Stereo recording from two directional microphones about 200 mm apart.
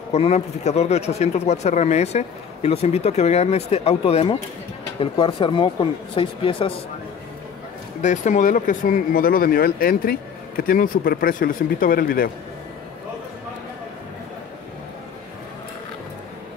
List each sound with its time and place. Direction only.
0.1 s speech: 35° left (ahead or behind)
8.0 s speech: 35° left (ahead or behind)